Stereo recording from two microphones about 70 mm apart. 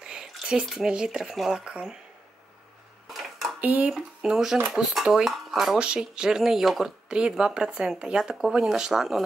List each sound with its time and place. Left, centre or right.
0.0 s drip: centre
0.7 s speech: centre
3.1 s a sound: centre
3.6 s speech: right
4.2 s speech: centre